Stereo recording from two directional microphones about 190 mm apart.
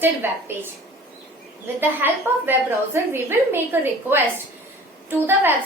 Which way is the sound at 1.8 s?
10° right (ahead or behind).